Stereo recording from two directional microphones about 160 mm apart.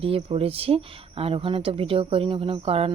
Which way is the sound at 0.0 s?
35° right (ahead or behind).